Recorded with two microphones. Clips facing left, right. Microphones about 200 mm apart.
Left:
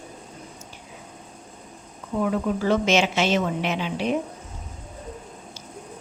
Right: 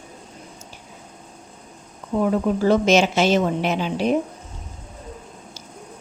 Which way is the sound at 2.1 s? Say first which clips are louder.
Right 4 dB; 40° right (ahead or behind).